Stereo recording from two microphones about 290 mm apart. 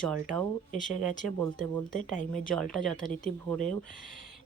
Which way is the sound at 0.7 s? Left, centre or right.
Left.